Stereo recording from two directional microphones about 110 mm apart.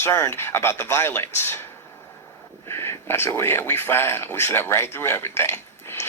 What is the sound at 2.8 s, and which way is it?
Speech, 20° left (ahead or behind).